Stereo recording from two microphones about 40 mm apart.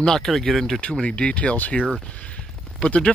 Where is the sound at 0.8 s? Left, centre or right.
Left.